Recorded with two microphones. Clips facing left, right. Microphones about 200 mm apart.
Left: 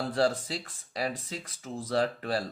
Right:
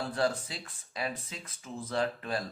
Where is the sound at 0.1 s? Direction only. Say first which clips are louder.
Left 4 dB; 30° left (ahead or behind).